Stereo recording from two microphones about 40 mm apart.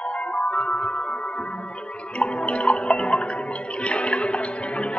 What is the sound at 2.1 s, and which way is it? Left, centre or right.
Music, left.